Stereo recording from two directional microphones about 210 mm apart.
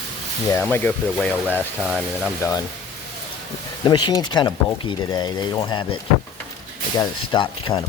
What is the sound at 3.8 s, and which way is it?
Speech, 20° left (ahead or behind).